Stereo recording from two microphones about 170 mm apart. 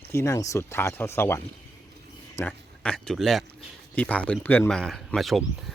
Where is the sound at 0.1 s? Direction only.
15° left (ahead or behind).